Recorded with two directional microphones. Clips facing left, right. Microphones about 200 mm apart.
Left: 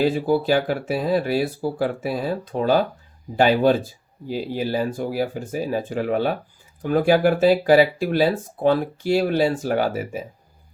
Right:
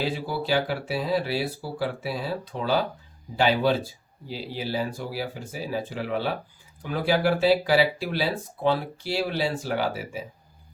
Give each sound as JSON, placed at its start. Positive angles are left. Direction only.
{"t": 0.0, "sound": "speech", "side_deg": 50}